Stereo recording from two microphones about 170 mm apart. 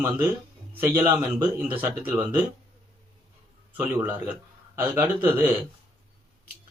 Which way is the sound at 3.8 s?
10° right (ahead or behind).